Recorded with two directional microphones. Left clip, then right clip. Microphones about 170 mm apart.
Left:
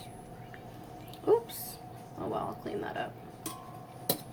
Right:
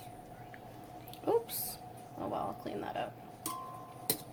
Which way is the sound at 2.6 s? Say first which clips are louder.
Left 2 dB; 45° right (ahead or behind).